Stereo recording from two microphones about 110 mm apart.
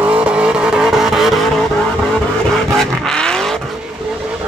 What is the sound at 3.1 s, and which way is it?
Vehicle, 5° left (ahead or behind).